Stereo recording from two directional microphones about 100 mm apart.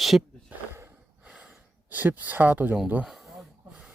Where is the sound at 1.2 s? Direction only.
10° right (ahead or behind).